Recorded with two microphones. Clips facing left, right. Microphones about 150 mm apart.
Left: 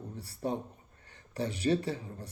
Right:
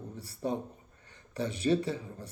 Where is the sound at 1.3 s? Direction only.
20° right (ahead or behind).